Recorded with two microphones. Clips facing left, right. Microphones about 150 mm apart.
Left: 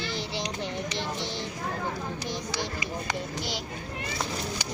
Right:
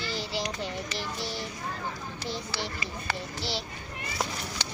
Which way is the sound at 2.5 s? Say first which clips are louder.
Left 3 dB; 15° left (ahead or behind).